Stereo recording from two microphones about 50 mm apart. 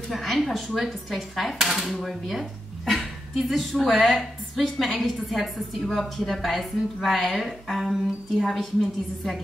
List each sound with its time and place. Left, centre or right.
0.1 s a woman's voice: centre